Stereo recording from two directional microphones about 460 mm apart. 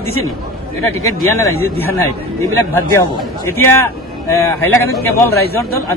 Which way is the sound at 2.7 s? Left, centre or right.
Centre.